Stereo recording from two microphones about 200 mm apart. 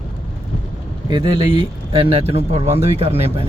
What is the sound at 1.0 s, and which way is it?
Speech, 20° right (ahead or behind).